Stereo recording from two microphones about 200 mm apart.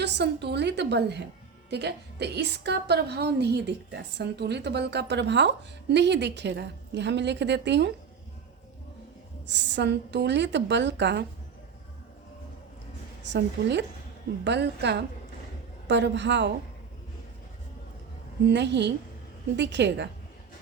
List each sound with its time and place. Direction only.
0.0 s a woman's voice: 55° right (ahead or behind)
9.5 s a woman's voice: 60° right (ahead or behind)
13.3 s a woman's voice: 60° right (ahead or behind)
18.4 s a woman's voice: 60° right (ahead or behind)